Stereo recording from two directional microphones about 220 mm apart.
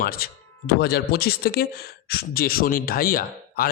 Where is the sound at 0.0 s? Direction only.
40° left (ahead or behind).